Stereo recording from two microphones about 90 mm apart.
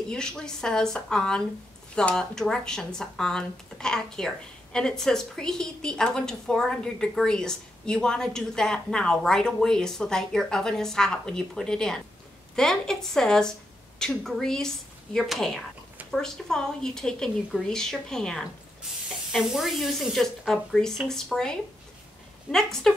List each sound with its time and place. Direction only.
0.1 s speech: 10° left (ahead or behind)